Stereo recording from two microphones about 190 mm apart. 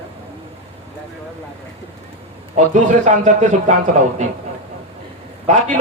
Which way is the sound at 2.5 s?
40° right (ahead or behind).